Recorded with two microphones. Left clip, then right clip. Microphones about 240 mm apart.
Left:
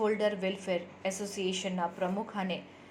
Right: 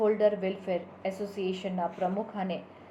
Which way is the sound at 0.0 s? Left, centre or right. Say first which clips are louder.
Right 4 dB; left.